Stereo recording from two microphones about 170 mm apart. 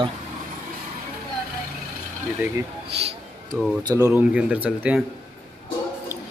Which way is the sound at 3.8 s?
20° right (ahead or behind).